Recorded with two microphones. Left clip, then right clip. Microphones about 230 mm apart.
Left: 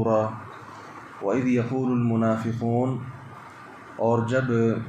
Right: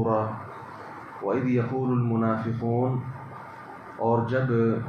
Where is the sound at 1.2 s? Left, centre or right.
Left.